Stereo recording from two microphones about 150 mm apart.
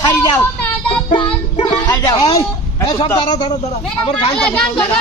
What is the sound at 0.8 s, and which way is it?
Child singing, 35° left (ahead or behind).